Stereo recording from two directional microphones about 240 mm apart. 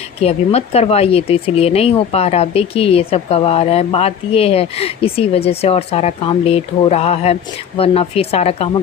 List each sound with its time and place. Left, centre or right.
0.2 s speech: left